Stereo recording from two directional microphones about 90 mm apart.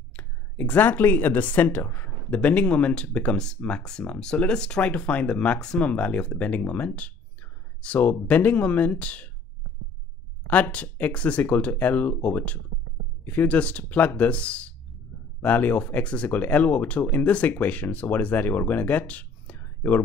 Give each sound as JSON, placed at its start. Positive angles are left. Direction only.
{"t": 0.1, "sound": "speech", "side_deg": 15}
{"t": 10.5, "sound": "speech", "side_deg": 15}
{"t": 18.7, "sound": "a sound", "side_deg": 20}